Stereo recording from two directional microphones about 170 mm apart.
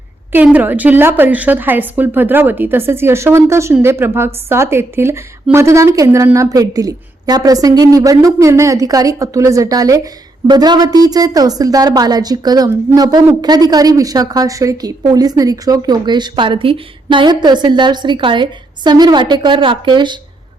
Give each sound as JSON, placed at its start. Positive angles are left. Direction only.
{"t": 0.3, "sound": "a woman's voice", "side_deg": -10}